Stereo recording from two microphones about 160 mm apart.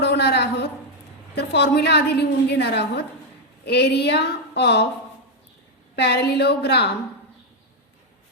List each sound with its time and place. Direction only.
0.0 s a sound: 90° left
1.4 s a woman's voice: 90° left
6.0 s a woman's voice: 90° left